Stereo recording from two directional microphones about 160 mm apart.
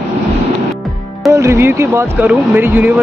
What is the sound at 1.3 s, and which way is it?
Speech, 15° right (ahead or behind).